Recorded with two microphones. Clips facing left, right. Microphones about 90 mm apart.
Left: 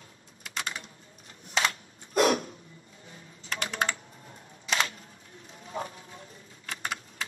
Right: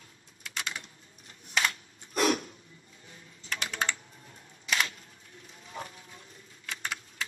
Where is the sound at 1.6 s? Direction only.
40° left (ahead or behind).